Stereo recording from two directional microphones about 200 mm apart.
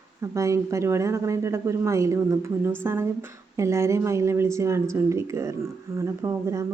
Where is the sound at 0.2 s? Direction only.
15° right (ahead or behind).